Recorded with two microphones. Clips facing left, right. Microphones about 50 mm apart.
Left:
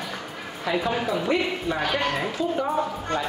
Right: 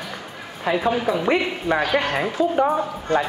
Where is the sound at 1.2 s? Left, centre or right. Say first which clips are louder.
Right 4 dB; right.